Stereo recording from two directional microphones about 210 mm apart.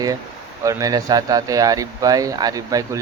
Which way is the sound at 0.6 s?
15° right (ahead or behind).